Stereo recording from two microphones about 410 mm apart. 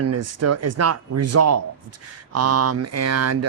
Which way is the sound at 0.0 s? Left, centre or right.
Right.